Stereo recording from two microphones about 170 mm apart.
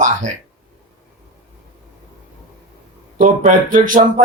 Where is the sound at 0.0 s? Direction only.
50° right (ahead or behind).